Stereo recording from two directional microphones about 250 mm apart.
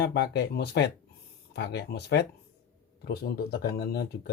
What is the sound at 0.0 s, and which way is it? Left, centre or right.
Speech, left.